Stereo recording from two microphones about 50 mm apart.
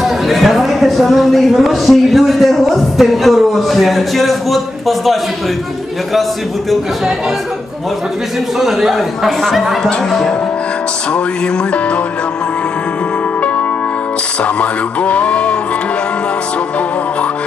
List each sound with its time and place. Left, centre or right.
0.0 s speech: centre
8.5 s speech: centre
14.4 s speech: left